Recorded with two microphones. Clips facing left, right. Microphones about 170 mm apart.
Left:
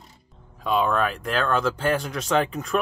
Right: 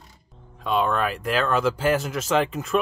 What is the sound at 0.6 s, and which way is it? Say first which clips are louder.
Speech: left 1 dB; centre (ahead or behind).